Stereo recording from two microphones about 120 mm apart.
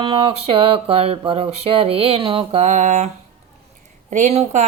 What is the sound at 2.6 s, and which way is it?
Speech, 90° right.